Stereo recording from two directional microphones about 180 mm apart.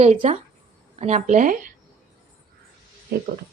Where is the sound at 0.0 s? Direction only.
35° right (ahead or behind).